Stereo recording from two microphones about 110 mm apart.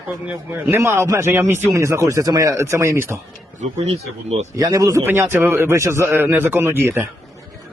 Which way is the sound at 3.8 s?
90° right.